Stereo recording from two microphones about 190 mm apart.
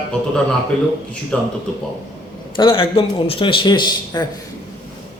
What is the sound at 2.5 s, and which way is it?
A man's voice, 25° left (ahead or behind).